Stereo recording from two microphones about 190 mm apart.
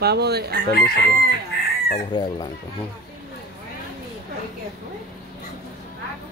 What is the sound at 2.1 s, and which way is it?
Speech, 25° left (ahead or behind).